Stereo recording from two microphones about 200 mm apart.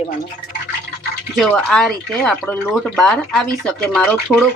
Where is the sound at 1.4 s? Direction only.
5° left (ahead or behind).